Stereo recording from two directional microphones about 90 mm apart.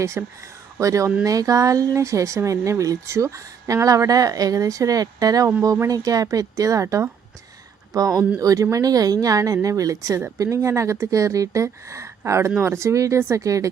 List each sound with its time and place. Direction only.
0.0 s speech: 35° right (ahead or behind)